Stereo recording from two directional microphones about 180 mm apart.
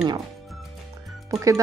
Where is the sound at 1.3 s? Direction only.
15° right (ahead or behind).